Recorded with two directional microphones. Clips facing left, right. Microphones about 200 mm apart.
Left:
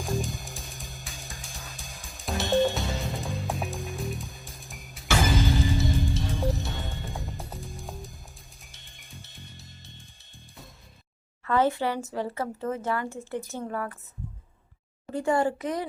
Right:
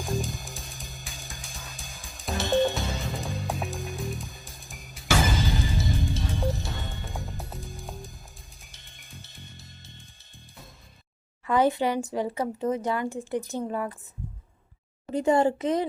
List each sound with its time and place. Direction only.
0.0 s music: centre (ahead or behind)
11.4 s speech: 15° right (ahead or behind)
15.1 s speech: 20° right (ahead or behind)